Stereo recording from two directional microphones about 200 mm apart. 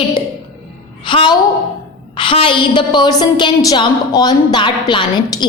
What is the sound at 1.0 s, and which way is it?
A woman's voice, 25° left (ahead or behind).